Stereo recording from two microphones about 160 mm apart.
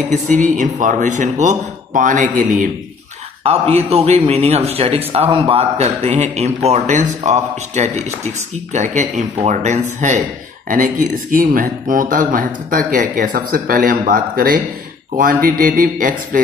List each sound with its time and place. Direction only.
0.1 s speech: 50° right (ahead or behind)
3.4 s speech: 40° right (ahead or behind); by 16.3 s 55° right (ahead or behind)